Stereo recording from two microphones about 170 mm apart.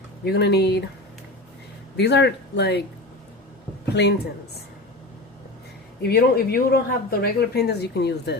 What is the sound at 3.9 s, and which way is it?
Speech, 85° left.